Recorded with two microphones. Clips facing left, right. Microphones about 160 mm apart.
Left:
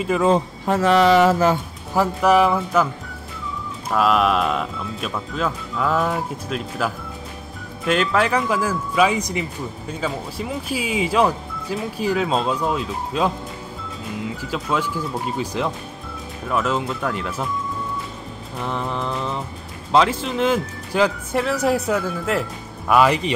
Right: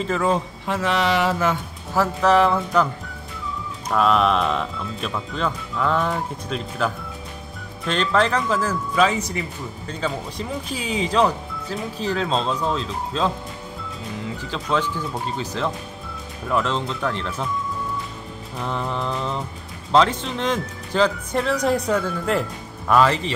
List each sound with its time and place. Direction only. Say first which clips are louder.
0.0 s speech: left 3 dB; 15° left (ahead or behind)
0.7 s mantra: left 6 dB; 45° left (ahead or behind)
2.0 s speech: left 1 dB; 10° left (ahead or behind)
3.9 s speech: even; 5° left (ahead or behind)
14.4 s speech: right 1 dB; 10° left (ahead or behind)
18.6 s speech: left 1 dB; centre (ahead or behind)